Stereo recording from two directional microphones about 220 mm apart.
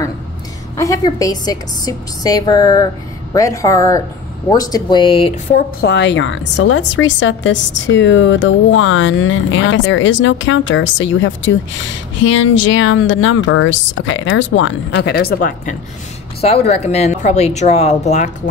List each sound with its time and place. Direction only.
0.7 s a woman's voice: 15° left (ahead or behind)
5.5 s a woman's voice: 40° left (ahead or behind)
6.6 s a woman's voice: 70° left (ahead or behind); by 15.7 s 40° left (ahead or behind)
16.3 s speech: 25° left (ahead or behind)